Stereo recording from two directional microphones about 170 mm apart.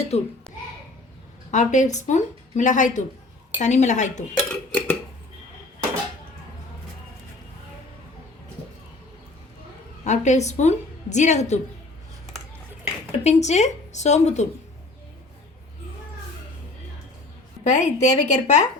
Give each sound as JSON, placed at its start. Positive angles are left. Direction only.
{"t": 0.1, "sound": "a child's voice", "side_deg": 40}
{"t": 1.5, "sound": "speech", "side_deg": 45}
{"t": 4.4, "sound": "dishes", "side_deg": 10}
{"t": 10.0, "sound": "a woman's voice", "side_deg": 45}
{"t": 13.1, "sound": "speech", "side_deg": 40}
{"t": 17.6, "sound": "speech", "side_deg": 45}